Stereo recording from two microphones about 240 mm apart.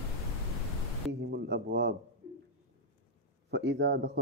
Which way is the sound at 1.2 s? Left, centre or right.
Right.